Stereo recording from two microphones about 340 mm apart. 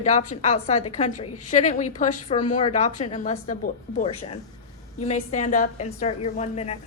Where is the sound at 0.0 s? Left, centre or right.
Left.